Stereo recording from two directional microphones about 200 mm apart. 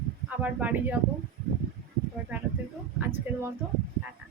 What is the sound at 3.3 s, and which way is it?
Speech, 10° right (ahead or behind).